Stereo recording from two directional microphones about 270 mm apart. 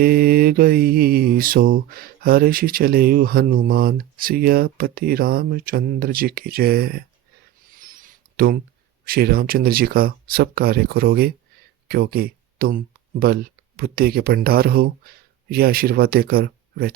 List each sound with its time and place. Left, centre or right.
0.0 s mantra: right
7.7 s a sound: right
9.0 s mantra: right
11.9 s speech: right